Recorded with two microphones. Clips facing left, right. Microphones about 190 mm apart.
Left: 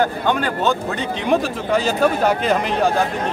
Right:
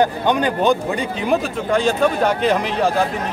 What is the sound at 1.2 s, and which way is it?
Speech, centre (ahead or behind).